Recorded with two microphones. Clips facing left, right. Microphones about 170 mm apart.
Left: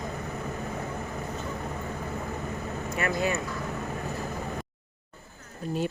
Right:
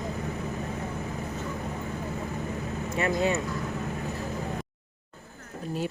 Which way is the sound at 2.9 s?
25° right (ahead or behind).